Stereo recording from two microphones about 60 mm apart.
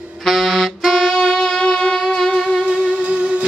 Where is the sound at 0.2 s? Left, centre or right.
Centre.